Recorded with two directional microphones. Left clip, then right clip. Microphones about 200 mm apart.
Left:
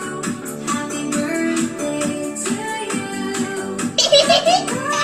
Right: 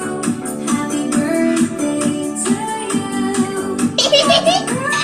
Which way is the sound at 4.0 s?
40° left (ahead or behind).